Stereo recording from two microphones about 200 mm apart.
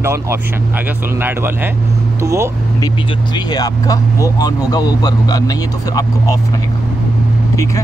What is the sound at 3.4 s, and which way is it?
Speech, 20° left (ahead or behind).